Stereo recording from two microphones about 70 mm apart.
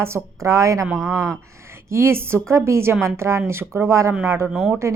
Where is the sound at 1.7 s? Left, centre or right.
Right.